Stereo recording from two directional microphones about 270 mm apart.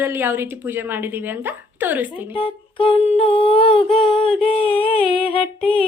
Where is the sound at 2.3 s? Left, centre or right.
Centre.